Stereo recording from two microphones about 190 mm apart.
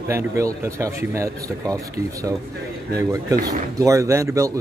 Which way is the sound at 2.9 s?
20° right (ahead or behind).